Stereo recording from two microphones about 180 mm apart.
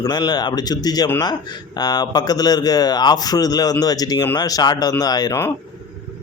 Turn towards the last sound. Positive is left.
turn(degrees=15)  # may be behind; listen again after turning